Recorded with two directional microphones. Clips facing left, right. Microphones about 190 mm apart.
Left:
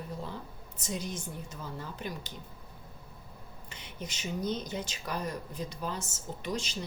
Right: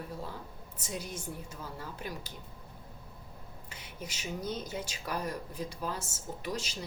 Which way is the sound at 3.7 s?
5° right (ahead or behind).